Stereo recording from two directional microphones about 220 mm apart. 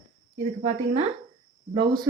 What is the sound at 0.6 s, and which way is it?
Speech, 30° right (ahead or behind).